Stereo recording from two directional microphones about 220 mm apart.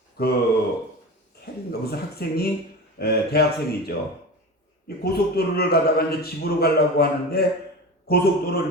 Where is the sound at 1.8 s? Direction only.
45° left (ahead or behind).